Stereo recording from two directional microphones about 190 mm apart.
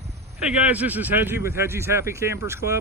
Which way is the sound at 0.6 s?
10° right (ahead or behind).